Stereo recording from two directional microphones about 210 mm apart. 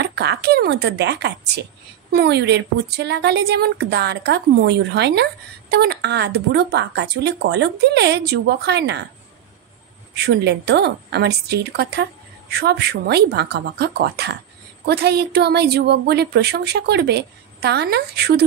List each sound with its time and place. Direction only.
0.0 s a woman's voice: 50° right (ahead or behind)
10.1 s a woman's voice: 55° right (ahead or behind)